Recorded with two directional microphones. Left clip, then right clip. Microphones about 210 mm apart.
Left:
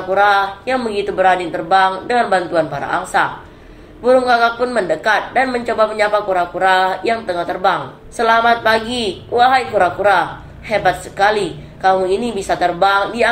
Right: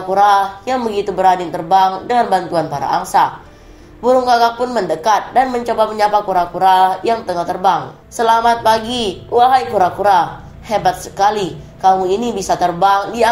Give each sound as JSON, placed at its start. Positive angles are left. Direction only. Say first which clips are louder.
{"t": 0.1, "sound": "speech", "louder": "right 2 dB", "side_deg": -25}
{"t": 8.2, "sound": "speech", "louder": "even", "side_deg": -25}